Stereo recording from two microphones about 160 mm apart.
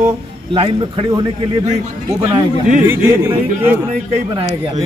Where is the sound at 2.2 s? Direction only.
30° right (ahead or behind).